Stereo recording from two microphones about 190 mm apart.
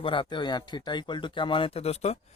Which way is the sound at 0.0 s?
25° left (ahead or behind).